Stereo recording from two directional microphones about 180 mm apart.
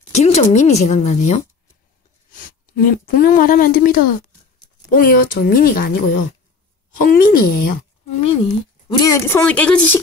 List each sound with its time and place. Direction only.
0.1 s a woman's voice: 40° left (ahead or behind)
8.2 s speech: 30° left (ahead or behind); by 9.9 s 5° left (ahead or behind)